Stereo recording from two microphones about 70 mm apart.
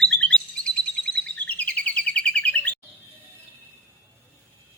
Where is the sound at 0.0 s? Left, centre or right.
Centre.